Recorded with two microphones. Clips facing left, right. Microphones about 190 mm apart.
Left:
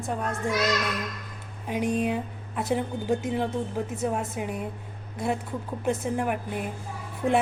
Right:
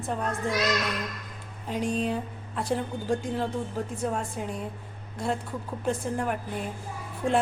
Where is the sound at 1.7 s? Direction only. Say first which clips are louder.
Left 2 dB; 15° left (ahead or behind).